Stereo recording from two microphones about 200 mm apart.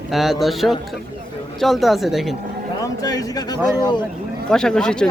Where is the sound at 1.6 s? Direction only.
Centre (ahead or behind).